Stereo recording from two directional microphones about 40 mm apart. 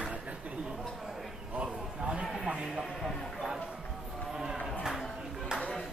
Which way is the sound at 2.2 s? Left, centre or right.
Centre.